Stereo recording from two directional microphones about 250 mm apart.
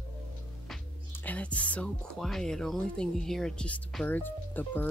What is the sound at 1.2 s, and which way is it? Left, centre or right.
Speech, centre.